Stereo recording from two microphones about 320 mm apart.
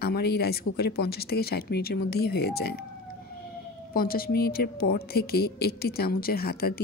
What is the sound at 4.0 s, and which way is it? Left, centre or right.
Speech, left.